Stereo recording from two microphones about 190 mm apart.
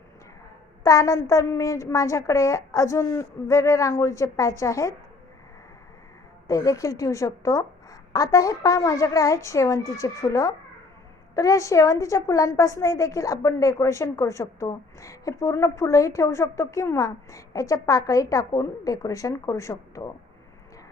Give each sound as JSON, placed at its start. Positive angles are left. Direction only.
{"t": 0.9, "sound": "a woman's voice", "side_deg": 15}
{"t": 6.5, "sound": "a woman's voice", "side_deg": 15}